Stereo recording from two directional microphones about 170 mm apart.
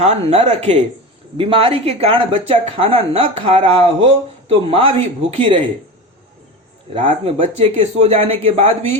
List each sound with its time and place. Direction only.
0.0 s speech: 40° right (ahead or behind)
6.9 s speech: 35° right (ahead or behind)